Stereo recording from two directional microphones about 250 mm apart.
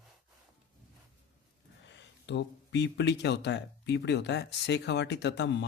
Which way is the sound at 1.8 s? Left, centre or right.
Left.